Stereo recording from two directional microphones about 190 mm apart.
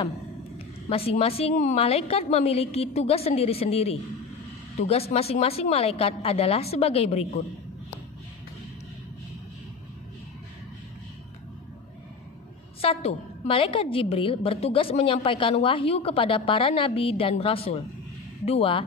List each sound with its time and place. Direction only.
0.8 s a woman's voice: 30° left (ahead or behind)
12.8 s a woman's voice: 30° left (ahead or behind)